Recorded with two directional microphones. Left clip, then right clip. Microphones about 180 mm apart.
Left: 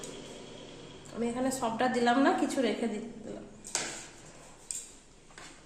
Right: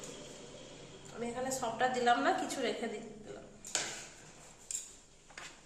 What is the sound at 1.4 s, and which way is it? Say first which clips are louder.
Speech: left 2 dB; 50° left (ahead or behind).